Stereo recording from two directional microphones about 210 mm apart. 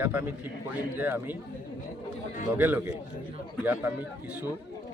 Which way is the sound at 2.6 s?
10° right (ahead or behind).